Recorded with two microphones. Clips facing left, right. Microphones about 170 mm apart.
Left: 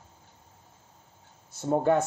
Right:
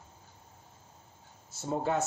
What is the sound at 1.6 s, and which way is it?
Speech, 60° left (ahead or behind).